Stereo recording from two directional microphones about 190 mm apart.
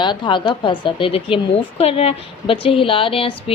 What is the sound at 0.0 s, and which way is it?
A woman's voice, 25° left (ahead or behind).